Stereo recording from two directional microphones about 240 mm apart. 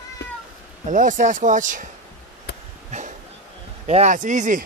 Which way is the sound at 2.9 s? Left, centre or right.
Right.